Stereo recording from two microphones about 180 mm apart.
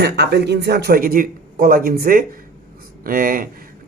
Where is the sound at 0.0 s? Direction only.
65° right (ahead or behind).